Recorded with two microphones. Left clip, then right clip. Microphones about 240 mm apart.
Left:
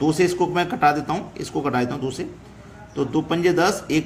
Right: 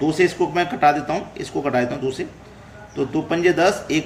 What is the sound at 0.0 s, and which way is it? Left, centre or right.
A man's voice, left.